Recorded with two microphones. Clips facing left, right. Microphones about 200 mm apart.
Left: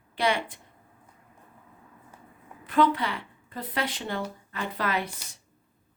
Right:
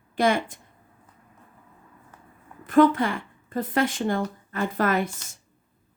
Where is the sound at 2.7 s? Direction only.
45° right (ahead or behind).